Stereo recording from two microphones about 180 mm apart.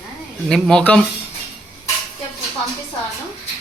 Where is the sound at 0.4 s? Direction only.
5° left (ahead or behind).